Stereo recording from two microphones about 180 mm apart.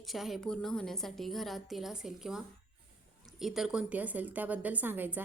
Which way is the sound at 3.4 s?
Centre (ahead or behind).